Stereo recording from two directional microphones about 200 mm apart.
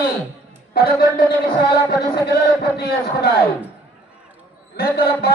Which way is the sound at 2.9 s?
50° left (ahead or behind).